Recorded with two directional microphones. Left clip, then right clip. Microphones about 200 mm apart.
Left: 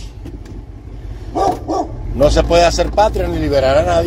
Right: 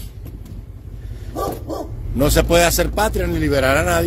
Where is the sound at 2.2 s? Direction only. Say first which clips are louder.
Left 4 dB; 45° right (ahead or behind).